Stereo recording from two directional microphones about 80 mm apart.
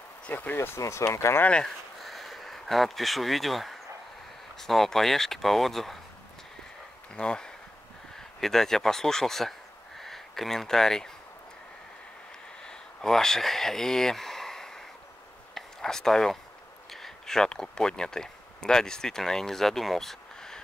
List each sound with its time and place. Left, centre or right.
0.2 s speech: left
0.6 s speech: left
1.4 s speech: centre
2.0 s crow: centre
4.6 s speech: centre
7.2 s speech: centre
12.6 s a sound: centre
16.9 s speech: centre